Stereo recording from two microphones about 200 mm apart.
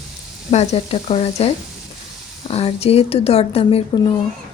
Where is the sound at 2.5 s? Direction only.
30° left (ahead or behind).